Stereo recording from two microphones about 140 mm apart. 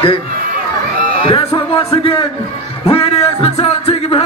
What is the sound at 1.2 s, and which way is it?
Speech, 40° left (ahead or behind).